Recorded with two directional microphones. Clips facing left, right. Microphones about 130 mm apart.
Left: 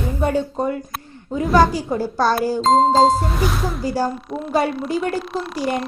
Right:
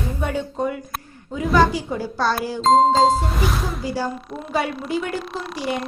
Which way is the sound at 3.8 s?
45° left (ahead or behind).